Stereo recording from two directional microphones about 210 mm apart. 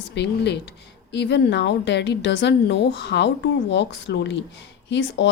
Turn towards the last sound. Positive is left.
turn(degrees=60)  # may be behind; listen again after turning